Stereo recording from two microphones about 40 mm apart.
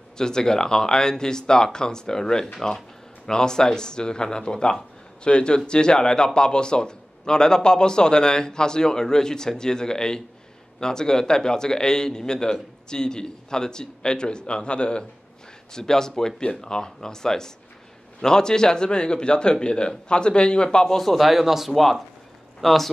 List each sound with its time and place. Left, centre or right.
0.2 s a man's voice: centre
15.7 s a man's voice: centre
21.3 s speech: centre